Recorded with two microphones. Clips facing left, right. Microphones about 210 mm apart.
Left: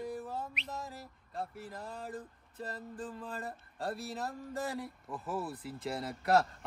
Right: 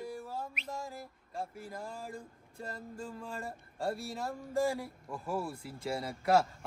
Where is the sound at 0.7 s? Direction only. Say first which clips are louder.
Right 2 dB; centre (ahead or behind).